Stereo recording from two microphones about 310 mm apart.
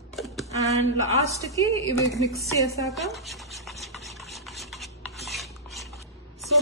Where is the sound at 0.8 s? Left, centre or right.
Right.